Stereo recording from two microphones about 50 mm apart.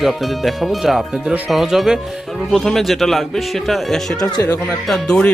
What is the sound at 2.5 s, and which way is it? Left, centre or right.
Speech, centre.